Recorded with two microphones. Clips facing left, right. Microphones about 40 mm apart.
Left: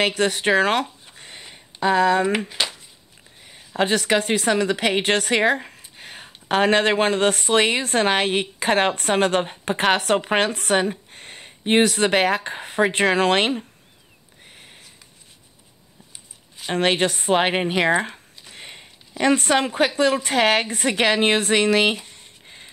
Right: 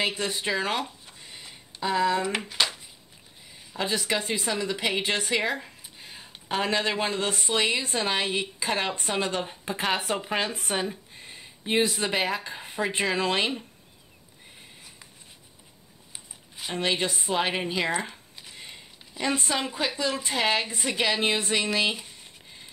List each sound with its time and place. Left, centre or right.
0.0 s speech: left
2.6 s a sound: centre
3.7 s speech: left
16.7 s a woman's voice: left
18.5 s a sound: left
20.2 s a woman's voice: left